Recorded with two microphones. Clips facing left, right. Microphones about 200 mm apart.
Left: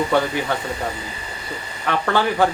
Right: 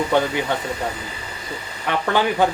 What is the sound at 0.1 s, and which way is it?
Speech, 20° right (ahead or behind).